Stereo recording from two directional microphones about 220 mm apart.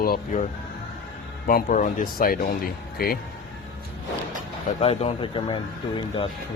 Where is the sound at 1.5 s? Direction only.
40° left (ahead or behind).